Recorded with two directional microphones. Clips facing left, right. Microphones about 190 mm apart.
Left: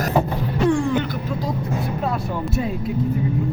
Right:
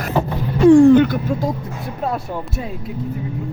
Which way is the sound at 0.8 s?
50° right (ahead or behind).